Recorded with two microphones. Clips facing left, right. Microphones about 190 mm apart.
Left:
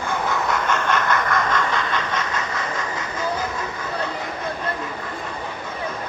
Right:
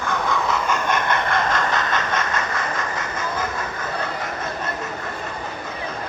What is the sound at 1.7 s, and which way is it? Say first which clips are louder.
Train: right 1 dB; 45° right (ahead or behind).